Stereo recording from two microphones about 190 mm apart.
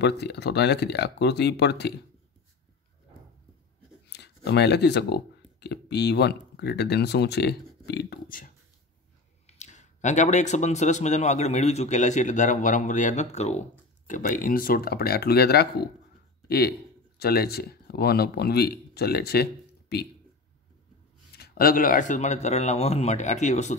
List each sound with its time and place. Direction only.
0.0 s speech: 60° left (ahead or behind)
4.1 s speech: 60° left (ahead or behind)
9.6 s a man's voice: 40° left (ahead or behind); by 20.1 s 55° left (ahead or behind)
21.4 s a man's voice: 50° left (ahead or behind)